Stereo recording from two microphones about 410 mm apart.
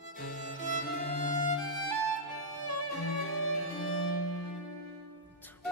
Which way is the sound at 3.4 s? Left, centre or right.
Left.